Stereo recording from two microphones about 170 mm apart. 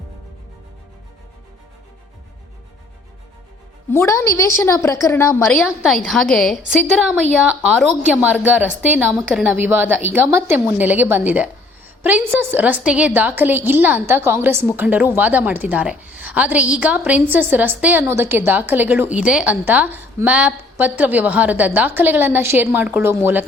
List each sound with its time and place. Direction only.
3.8 s a woman's voice: 15° left (ahead or behind)
5.6 s a woman's voice: centre (ahead or behind)